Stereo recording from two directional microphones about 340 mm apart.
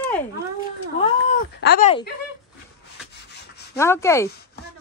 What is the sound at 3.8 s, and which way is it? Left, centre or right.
Speech, centre.